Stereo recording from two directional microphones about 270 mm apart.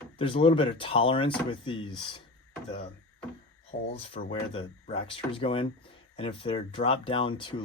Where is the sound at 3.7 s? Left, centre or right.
Left.